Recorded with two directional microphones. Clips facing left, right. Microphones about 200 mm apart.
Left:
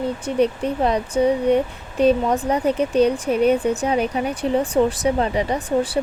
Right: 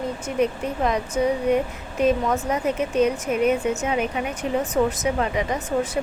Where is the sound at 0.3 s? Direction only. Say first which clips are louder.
Left 3 dB; 35° left (ahead or behind).